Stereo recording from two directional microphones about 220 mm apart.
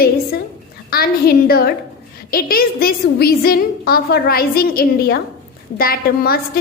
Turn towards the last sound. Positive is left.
turn(degrees=45)  # may be behind; listen again after turning